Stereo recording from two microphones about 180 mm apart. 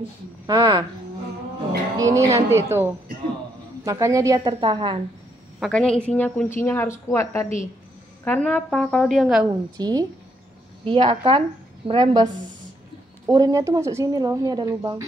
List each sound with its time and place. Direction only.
0.5 s a woman's voice: 20° right (ahead or behind)
2.0 s a woman's voice: 15° right (ahead or behind)
5.6 s a woman's voice: 5° left (ahead or behind)
9.4 s a woman's voice: 20° right (ahead or behind)
13.3 s a woman's voice: 20° right (ahead or behind)